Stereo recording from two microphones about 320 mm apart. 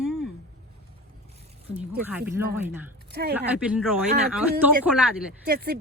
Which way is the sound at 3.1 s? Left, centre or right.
Right.